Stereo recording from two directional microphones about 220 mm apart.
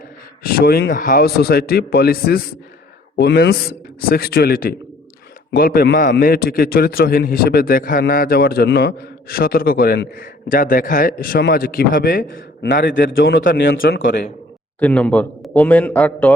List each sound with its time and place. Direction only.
0.4 s a man's voice: 45° left (ahead or behind)
14.8 s a man's voice: 5° left (ahead or behind)